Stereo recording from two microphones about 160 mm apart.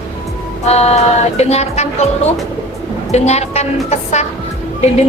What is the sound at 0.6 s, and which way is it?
Music, 40° left (ahead or behind).